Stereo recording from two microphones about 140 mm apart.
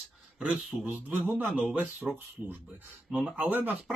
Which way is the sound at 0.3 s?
10° right (ahead or behind).